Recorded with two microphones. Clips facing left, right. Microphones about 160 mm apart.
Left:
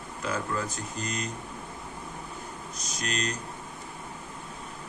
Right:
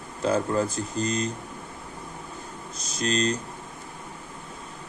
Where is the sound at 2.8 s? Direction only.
30° right (ahead or behind).